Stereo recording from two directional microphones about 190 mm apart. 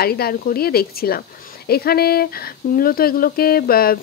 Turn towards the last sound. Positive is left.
turn(degrees=50)  # may be behind; listen again after turning